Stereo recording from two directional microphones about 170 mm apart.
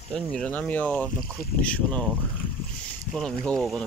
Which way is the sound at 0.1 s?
5° left (ahead or behind).